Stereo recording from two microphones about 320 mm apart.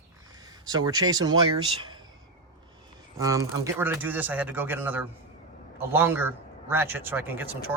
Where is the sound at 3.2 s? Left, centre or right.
Centre.